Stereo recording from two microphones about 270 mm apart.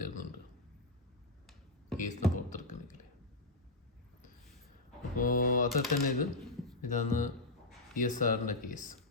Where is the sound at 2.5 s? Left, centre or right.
Left.